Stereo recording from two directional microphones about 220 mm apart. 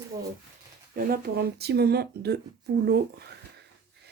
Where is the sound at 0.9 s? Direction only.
45° right (ahead or behind).